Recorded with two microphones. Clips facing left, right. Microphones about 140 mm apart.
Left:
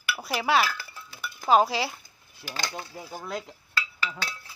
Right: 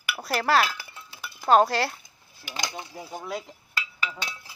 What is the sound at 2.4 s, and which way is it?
Speech, 15° right (ahead or behind).